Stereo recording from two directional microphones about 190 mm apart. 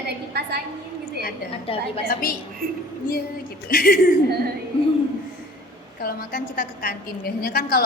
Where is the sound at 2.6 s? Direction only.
50° right (ahead or behind).